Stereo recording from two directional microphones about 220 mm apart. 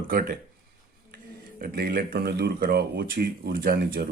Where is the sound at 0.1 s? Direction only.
40° right (ahead or behind).